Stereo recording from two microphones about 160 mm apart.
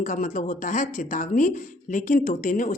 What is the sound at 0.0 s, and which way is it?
Speech, 55° left (ahead or behind).